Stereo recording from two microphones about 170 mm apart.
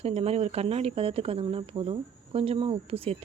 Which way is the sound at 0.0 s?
35° right (ahead or behind).